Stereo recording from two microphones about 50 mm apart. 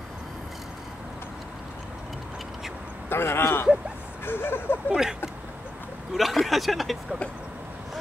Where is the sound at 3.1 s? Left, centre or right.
Left.